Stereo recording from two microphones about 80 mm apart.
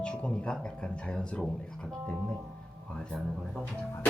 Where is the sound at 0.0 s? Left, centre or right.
Centre.